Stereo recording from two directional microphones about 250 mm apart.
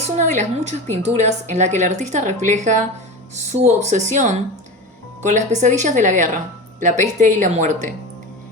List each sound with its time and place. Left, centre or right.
0.2 s a woman's voice: right